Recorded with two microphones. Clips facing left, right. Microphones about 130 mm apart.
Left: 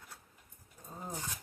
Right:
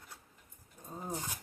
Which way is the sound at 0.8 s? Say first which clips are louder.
Right 3 dB; 15° right (ahead or behind).